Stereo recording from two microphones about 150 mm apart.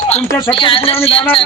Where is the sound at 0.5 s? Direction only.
35° left (ahead or behind).